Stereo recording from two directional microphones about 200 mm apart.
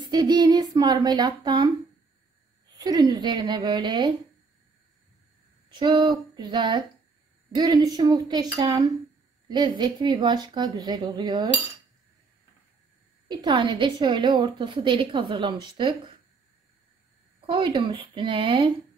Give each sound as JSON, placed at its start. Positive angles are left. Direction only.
{"t": 0.1, "sound": "a woman's voice", "side_deg": -20}
{"t": 2.8, "sound": "a woman's voice", "side_deg": -20}
{"t": 5.7, "sound": "a woman's voice", "side_deg": -25}
{"t": 13.3, "sound": "a woman's voice", "side_deg": -20}
{"t": 17.5, "sound": "a woman's voice", "side_deg": -25}